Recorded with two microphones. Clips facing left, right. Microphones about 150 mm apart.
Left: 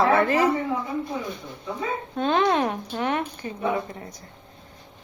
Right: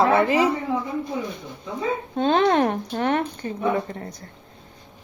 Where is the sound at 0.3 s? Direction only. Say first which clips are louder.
Right 1 dB; 15° right (ahead or behind).